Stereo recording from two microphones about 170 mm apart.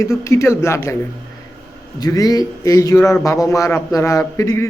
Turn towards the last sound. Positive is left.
turn(degrees=20)  # may be behind; listen again after turning